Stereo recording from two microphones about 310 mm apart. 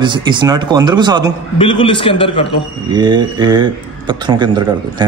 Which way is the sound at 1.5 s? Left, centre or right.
Centre.